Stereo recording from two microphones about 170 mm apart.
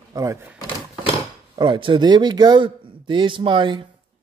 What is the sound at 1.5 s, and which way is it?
Speech, 30° right (ahead or behind).